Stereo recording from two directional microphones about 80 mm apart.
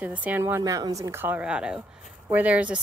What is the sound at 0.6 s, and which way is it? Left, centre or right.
Speech, right.